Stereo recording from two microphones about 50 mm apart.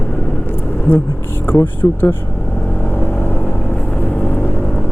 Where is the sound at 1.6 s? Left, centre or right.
Left.